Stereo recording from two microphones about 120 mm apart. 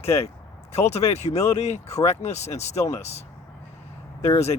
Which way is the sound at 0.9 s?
60° left (ahead or behind).